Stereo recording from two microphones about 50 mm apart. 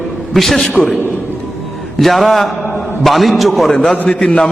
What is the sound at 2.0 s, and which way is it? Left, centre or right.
A man's voice, centre.